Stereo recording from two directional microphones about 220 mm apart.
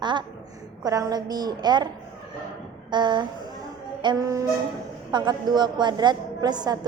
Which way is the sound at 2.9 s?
20° right (ahead or behind).